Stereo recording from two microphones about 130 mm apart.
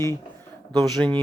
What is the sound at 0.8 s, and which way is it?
Speech, 5° left (ahead or behind).